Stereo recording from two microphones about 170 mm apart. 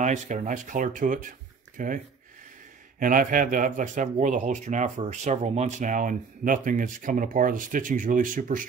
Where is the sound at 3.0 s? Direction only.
55° right (ahead or behind).